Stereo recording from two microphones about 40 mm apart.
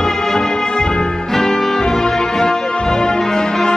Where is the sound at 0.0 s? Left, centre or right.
Centre.